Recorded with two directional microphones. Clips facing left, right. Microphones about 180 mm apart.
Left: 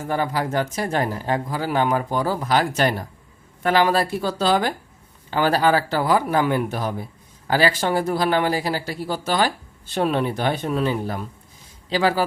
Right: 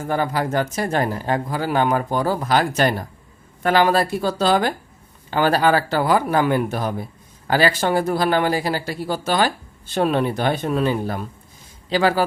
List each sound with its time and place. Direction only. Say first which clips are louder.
0.1 s speech: right 2 dB; 45° right (ahead or behind)